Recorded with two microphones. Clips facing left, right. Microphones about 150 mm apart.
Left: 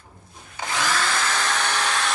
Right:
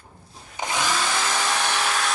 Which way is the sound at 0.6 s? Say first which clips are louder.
Even; 15° right (ahead or behind).